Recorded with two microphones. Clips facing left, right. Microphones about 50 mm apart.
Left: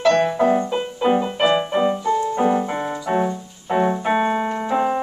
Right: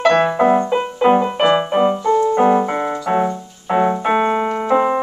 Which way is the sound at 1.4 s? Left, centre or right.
Right.